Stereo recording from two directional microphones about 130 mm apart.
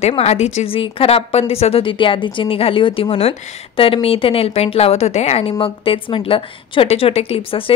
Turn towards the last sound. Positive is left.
turn(degrees=50)  # may be behind; listen again after turning